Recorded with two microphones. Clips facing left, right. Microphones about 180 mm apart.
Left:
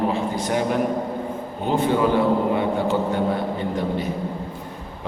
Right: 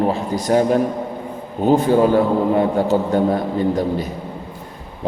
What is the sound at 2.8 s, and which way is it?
Speech, 40° right (ahead or behind).